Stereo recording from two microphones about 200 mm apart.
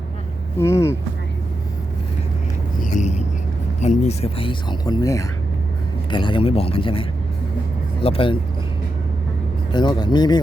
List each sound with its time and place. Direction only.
0.6 s speech: 15° left (ahead or behind)
2.8 s purr: 35° left (ahead or behind)
3.8 s speech: 35° left (ahead or behind)
8.0 s speech: 25° left (ahead or behind)
9.7 s speech: 20° left (ahead or behind)